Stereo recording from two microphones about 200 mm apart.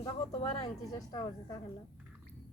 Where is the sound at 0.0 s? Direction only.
25° left (ahead or behind).